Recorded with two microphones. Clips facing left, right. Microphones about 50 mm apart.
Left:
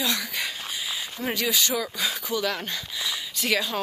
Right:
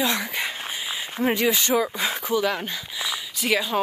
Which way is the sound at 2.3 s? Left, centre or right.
Centre.